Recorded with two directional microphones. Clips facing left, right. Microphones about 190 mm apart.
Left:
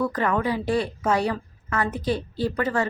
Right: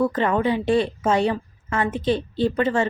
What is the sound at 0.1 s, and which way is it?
A woman's voice, 25° right (ahead or behind).